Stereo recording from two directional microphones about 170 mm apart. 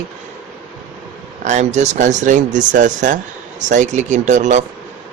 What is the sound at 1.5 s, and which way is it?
Speech, 45° right (ahead or behind).